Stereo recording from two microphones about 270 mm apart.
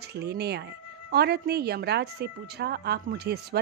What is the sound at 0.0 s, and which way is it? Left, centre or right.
A woman's voice, right.